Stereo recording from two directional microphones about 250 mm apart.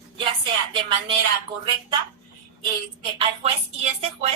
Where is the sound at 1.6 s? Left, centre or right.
Centre.